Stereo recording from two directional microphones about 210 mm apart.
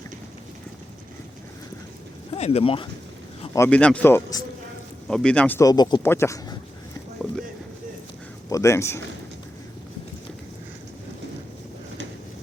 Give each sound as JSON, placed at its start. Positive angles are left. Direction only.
{"t": 2.3, "sound": "speech", "side_deg": 30}
{"t": 3.5, "sound": "speech", "side_deg": 10}
{"t": 8.4, "sound": "speech", "side_deg": 15}